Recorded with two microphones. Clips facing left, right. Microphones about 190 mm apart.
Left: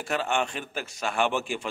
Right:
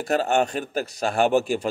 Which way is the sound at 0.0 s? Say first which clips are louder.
Right 6 dB; 40° right (ahead or behind).